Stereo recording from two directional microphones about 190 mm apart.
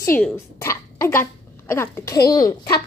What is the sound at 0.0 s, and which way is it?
A woman's voice, 10° left (ahead or behind).